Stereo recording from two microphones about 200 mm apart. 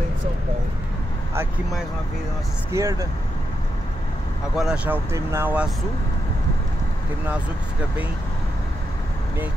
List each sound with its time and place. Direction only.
2.7 s speech: 15° right (ahead or behind)
4.6 s speech: 5° right (ahead or behind)